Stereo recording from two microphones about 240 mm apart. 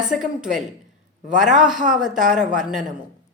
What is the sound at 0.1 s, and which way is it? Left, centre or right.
Speech, centre.